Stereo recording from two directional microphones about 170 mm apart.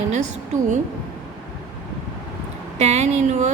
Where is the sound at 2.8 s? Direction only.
40° right (ahead or behind).